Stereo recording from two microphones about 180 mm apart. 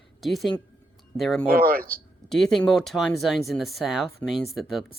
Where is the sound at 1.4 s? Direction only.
55° right (ahead or behind).